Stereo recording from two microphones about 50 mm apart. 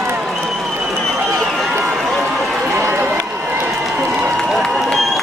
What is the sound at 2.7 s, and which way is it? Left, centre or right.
Run, right.